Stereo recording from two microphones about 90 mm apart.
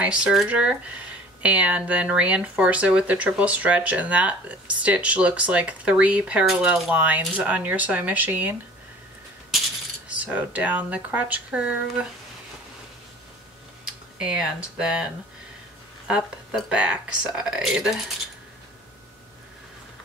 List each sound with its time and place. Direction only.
0.0 s speech: 10° right (ahead or behind)
10.0 s speech: 15° right (ahead or behind)
14.2 s speech: 10° right (ahead or behind)
16.5 s speech: 10° right (ahead or behind)